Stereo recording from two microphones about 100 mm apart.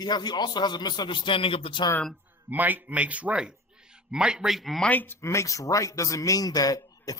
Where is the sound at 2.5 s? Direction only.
15° right (ahead or behind); by 4.9 s centre (ahead or behind).